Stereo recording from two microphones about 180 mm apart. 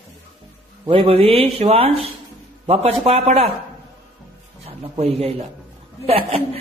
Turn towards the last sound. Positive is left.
turn(degrees=-35)  # may be behind; listen again after turning